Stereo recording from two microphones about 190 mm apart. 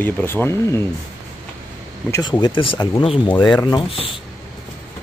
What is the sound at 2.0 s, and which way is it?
Speech, 20° left (ahead or behind).